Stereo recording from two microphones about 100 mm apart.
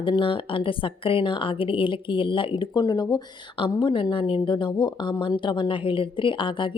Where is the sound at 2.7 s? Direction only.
40° left (ahead or behind).